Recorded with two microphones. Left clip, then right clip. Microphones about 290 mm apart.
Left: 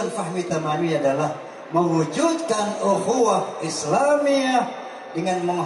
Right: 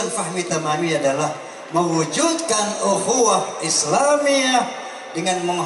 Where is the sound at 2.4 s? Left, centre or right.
Left.